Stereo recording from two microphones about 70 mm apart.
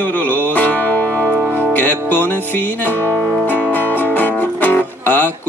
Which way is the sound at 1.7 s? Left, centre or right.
Left.